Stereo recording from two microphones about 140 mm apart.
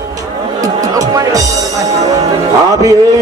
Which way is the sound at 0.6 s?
25° right (ahead or behind).